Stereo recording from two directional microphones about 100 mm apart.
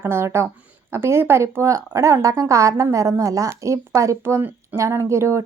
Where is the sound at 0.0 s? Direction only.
25° right (ahead or behind).